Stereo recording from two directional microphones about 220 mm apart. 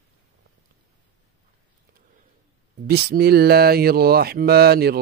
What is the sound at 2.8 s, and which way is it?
Speech, 45° right (ahead or behind).